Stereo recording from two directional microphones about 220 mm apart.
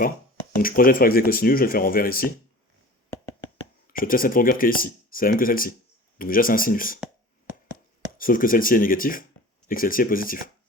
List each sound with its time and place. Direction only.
0.6 s speech: 40° left (ahead or behind)
3.9 s speech: 40° left (ahead or behind)
8.2 s speech: 40° left (ahead or behind)